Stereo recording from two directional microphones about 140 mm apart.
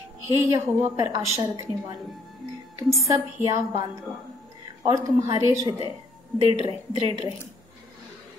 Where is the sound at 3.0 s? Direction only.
25° right (ahead or behind).